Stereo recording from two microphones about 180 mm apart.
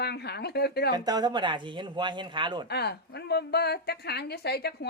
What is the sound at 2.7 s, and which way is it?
A woman's voice, 65° left (ahead or behind).